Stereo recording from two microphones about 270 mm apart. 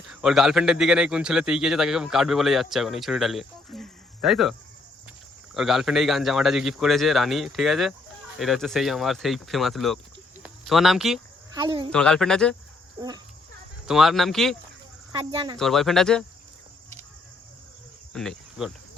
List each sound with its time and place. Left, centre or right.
0.1 s a man's voice: centre
5.5 s a man's voice: centre
11.5 s speech: centre
11.9 s a man's voice: centre
13.8 s a man's voice: centre
15.1 s speech: centre
15.5 s a man's voice: centre
18.1 s insect: centre